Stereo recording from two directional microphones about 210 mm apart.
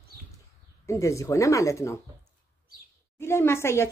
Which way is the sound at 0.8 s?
15° left (ahead or behind).